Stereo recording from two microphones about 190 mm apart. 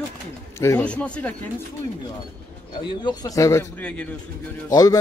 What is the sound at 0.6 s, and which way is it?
Speech, 10° left (ahead or behind).